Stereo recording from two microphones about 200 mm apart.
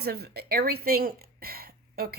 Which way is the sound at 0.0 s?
55° right (ahead or behind).